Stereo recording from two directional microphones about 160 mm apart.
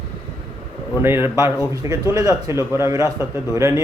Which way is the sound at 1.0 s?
15° right (ahead or behind).